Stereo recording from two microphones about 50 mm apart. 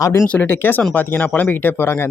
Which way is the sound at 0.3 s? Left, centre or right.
Left.